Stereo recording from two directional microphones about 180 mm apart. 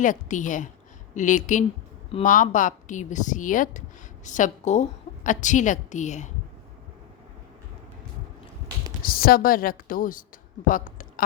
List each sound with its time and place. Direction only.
0.0 s speech: 45° left (ahead or behind)
9.0 s speech: 55° left (ahead or behind)